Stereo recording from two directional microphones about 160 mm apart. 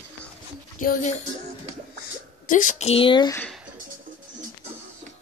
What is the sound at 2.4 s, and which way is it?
Speech, 55° left (ahead or behind).